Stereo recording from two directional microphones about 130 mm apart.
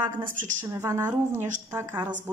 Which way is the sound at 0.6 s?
20° right (ahead or behind).